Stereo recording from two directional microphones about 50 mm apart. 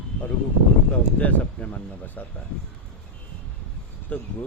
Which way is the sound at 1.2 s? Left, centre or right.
Left.